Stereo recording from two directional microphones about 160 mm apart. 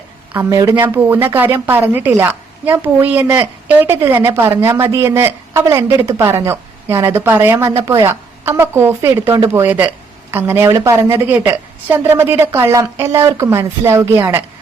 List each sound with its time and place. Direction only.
0.3 s a woman's voice: 20° right (ahead or behind)